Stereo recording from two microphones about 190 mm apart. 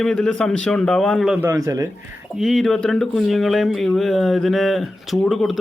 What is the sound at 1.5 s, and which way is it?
Speech, 15° right (ahead or behind).